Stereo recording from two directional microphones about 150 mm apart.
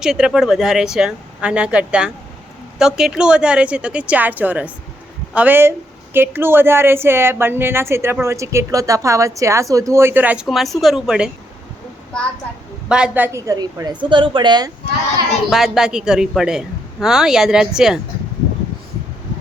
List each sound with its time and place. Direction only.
0.0 s a woman's voice: 5° right (ahead or behind)
10.4 s speech: centre (ahead or behind)
12.9 s a woman's voice: 10° right (ahead or behind)
13.5 s a woman's voice: 25° right (ahead or behind)
15.4 s speech: 5° right (ahead or behind)